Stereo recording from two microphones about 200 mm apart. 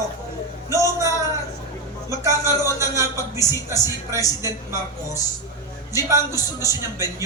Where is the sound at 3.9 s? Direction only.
15° right (ahead or behind).